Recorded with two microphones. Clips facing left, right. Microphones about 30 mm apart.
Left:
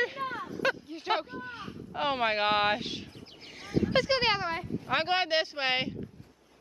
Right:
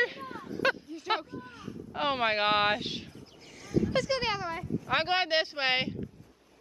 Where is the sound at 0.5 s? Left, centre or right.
Centre.